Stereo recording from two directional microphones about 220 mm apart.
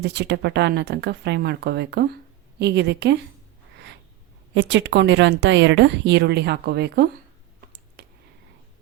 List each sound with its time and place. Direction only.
0.0 s speech: 50° right (ahead or behind)
4.5 s speech: 55° right (ahead or behind)